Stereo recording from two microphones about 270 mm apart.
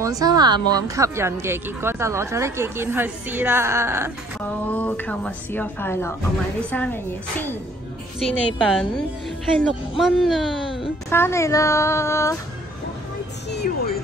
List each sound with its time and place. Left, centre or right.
0.0 s a woman's voice: centre
4.4 s a woman's voice: centre
13.5 s music: left